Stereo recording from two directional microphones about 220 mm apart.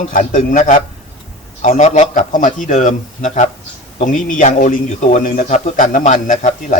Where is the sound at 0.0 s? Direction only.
35° left (ahead or behind).